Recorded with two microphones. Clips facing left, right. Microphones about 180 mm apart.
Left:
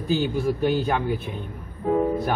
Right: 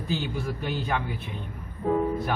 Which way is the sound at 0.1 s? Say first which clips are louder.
Left 8 dB; 40° left (ahead or behind).